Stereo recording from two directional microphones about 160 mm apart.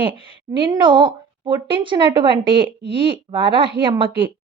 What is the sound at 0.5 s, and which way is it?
Speech, 30° right (ahead or behind).